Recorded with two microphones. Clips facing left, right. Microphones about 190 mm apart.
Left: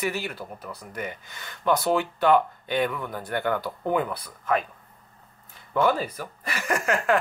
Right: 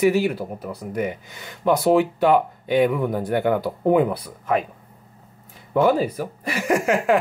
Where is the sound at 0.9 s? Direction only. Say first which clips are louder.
Right 10 dB; 10° right (ahead or behind).